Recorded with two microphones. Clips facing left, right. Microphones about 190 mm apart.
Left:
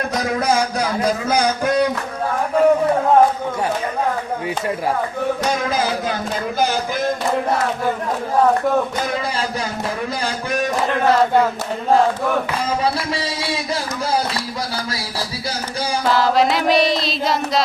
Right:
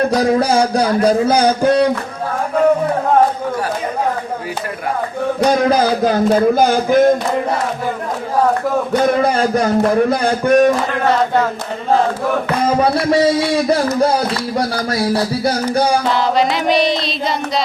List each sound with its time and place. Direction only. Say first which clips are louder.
0.1 s a man's voice: right 6 dB; 30° right (ahead or behind)
5.5 s a man's voice: right 7 dB; 40° right (ahead or behind)
8.9 s speech: right 9 dB; 60° right (ahead or behind)
12.6 s speech: right 6 dB; 55° right (ahead or behind)
16.0 s music: right 1 dB; centre (ahead or behind)